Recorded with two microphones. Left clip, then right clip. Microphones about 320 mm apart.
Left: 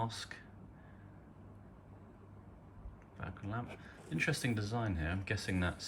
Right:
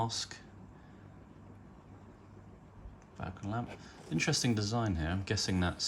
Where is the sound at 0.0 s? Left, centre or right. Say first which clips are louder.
Right 5 dB; centre.